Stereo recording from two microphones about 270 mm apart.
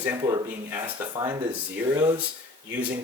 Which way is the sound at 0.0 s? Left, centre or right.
Centre.